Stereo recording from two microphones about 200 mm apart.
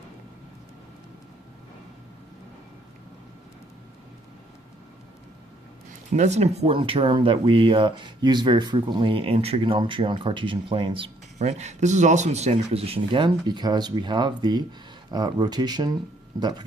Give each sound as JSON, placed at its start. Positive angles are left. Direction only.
{"t": 6.1, "sound": "speech", "side_deg": -35}